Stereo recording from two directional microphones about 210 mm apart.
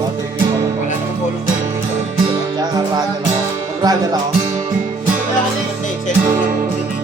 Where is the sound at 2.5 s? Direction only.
20° right (ahead or behind).